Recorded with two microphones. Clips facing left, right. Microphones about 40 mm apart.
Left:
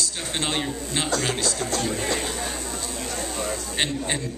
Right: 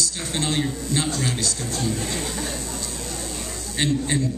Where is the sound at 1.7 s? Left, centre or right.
Left.